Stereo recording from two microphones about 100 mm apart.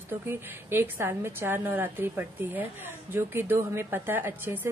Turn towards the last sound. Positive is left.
turn(degrees=-20)  # may be behind; listen again after turning